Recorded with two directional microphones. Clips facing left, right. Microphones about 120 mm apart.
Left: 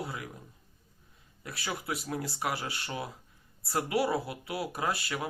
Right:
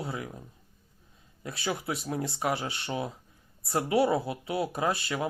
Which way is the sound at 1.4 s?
25° right (ahead or behind).